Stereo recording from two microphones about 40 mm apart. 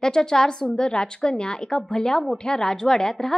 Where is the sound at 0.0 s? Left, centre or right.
Centre.